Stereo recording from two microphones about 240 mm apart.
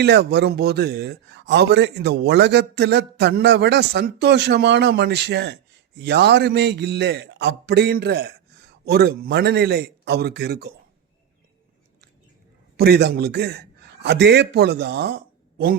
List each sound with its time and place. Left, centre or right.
0.0 s a man's voice: right
12.7 s a man's voice: right